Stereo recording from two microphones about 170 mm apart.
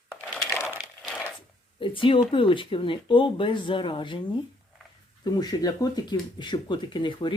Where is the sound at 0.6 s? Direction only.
10° right (ahead or behind).